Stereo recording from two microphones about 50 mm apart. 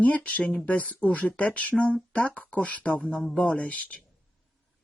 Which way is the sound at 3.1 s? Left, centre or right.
Centre.